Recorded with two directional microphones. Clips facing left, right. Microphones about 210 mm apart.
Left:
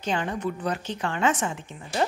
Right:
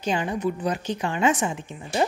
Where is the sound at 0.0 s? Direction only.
10° right (ahead or behind).